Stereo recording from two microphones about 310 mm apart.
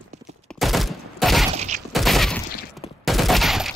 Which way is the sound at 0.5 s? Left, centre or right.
Centre.